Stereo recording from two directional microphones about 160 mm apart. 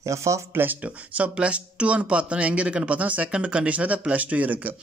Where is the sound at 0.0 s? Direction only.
20° right (ahead or behind).